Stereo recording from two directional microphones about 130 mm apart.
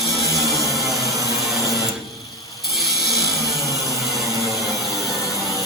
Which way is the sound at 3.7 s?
25° left (ahead or behind).